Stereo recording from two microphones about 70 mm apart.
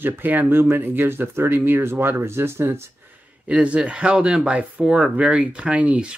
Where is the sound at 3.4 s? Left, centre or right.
Centre.